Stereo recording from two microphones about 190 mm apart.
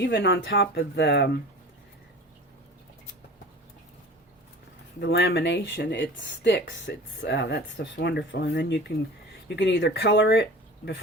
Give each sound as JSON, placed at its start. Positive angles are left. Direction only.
{"t": 0.0, "sound": "speech", "side_deg": 65}
{"t": 4.9, "sound": "speech", "side_deg": 55}